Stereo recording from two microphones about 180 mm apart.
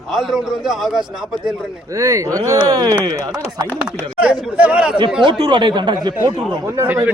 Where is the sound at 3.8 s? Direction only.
5° right (ahead or behind).